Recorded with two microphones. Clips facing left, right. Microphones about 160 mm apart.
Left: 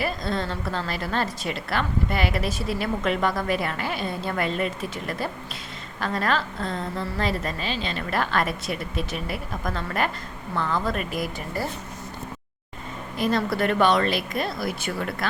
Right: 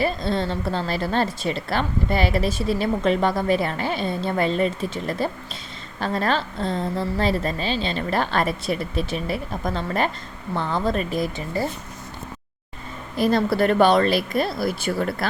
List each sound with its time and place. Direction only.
0.0 s a woman's voice: 25° right (ahead or behind)
13.1 s speech: 35° right (ahead or behind)